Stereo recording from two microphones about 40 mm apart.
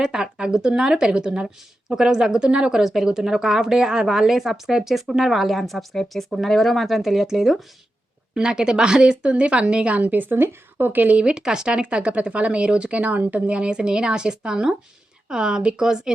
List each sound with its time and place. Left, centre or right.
0.0 s speech: centre
2.7 s a woman's voice: centre
8.4 s speech: centre; by 10.0 s right
10.0 s a woman's voice: right
10.3 s speech: right
11.1 s speech: right